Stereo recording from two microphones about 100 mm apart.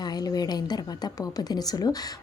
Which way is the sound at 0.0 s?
40° left (ahead or behind).